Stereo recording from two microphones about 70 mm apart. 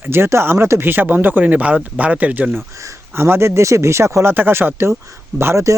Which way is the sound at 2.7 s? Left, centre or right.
Right.